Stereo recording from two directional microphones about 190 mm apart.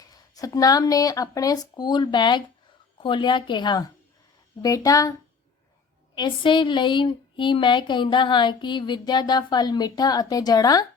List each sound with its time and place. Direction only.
0.0 s speech: 20° left (ahead or behind)
6.1 s speech: 25° left (ahead or behind)